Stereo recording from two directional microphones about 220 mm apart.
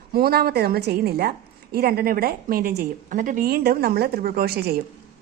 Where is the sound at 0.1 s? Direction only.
45° right (ahead or behind).